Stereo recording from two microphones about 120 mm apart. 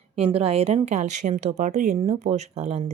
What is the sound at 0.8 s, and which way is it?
Speech, 80° right.